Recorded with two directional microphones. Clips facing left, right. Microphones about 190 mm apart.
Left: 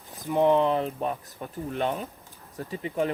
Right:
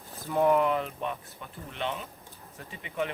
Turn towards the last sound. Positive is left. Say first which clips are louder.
# left 6 dB
turn(degrees=40)  # may be behind; listen again after turning